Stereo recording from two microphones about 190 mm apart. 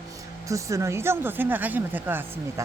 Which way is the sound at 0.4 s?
15° right (ahead or behind).